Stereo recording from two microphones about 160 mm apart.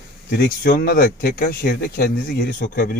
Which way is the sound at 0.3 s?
70° left (ahead or behind).